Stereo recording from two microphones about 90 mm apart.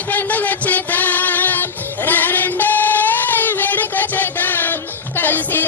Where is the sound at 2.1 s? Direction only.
20° left (ahead or behind).